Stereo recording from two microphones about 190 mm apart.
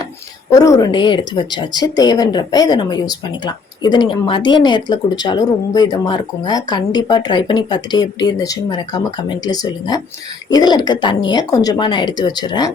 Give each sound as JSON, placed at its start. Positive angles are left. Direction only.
{"t": 0.5, "sound": "speech", "side_deg": 15}